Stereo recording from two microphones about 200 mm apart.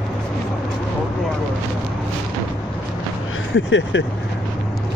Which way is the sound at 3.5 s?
65° left (ahead or behind).